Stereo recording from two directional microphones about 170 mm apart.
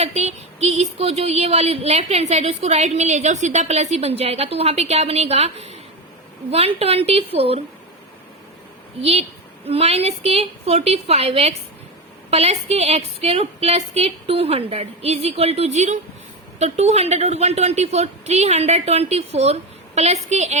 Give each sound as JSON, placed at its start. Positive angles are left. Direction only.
{"t": 0.0, "sound": "speech", "side_deg": -40}
{"t": 9.0, "sound": "speech", "side_deg": -35}